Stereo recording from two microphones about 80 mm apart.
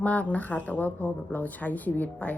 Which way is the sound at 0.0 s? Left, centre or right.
Centre.